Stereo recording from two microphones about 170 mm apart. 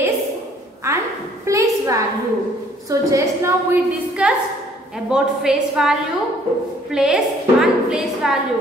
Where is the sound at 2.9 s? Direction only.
20° right (ahead or behind).